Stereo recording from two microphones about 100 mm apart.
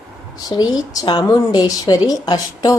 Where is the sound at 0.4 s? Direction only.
45° left (ahead or behind).